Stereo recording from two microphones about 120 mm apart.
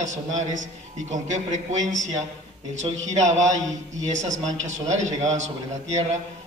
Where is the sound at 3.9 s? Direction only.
90° right.